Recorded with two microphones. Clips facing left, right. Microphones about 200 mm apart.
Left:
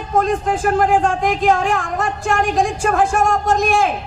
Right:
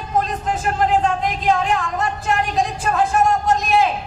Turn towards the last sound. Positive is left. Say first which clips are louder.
# left 1 dB
turn(degrees=50)  # may be behind; listen again after turning